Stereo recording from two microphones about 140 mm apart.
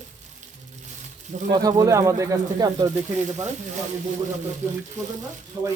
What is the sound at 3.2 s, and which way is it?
Speech, 55° right (ahead or behind).